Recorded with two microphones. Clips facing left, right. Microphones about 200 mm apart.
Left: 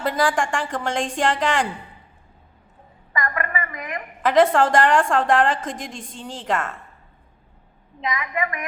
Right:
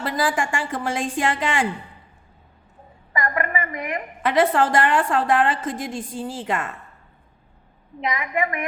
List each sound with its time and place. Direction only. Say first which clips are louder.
0.0 s a woman's voice: left 2 dB; 5° right (ahead or behind)
3.1 s a woman's voice: right 2 dB; 25° right (ahead or behind)
4.2 s a woman's voice: left 2 dB; 5° right (ahead or behind)
8.0 s a woman's voice: right 2 dB; 30° right (ahead or behind)